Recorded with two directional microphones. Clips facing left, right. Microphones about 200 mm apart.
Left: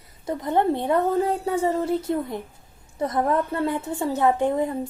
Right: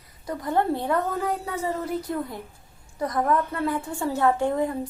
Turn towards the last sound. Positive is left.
turn(degrees=20)  # may be behind; listen again after turning